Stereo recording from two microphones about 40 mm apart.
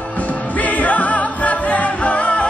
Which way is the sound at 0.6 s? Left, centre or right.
Left.